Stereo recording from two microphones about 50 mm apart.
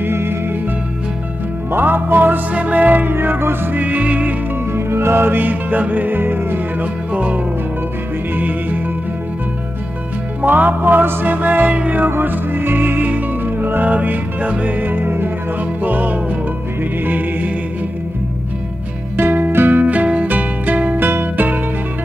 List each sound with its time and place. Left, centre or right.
0.0 s music: right
1.7 s music: right
2.5 s music: right
3.8 s music: right
4.7 s music: right
6.8 s music: right
10.4 s music: right
12.2 s music: right
19.1 s music: right
19.8 s music: right
21.0 s music: right